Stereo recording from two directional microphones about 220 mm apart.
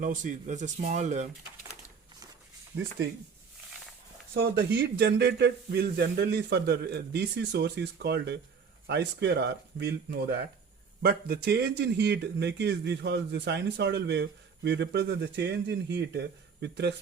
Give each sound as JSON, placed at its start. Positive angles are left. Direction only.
{"t": 0.0, "sound": "speech", "side_deg": -35}
{"t": 4.5, "sound": "speech", "side_deg": -45}